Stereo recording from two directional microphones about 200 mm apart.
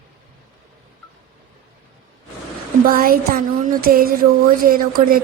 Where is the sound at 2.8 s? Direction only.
45° right (ahead or behind).